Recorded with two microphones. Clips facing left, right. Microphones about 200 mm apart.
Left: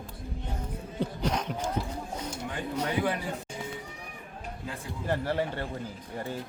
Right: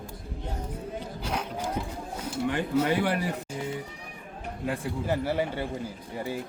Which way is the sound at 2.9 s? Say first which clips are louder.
Right 3 dB; 75° right (ahead or behind).